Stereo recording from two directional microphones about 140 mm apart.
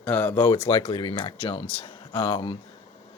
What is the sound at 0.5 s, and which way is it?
Speech, 35° left (ahead or behind).